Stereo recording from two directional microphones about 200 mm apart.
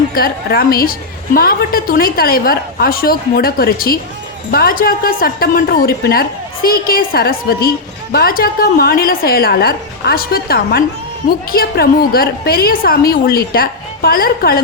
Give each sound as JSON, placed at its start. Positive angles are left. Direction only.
{"t": 0.1, "sound": "a woman's voice", "side_deg": 50}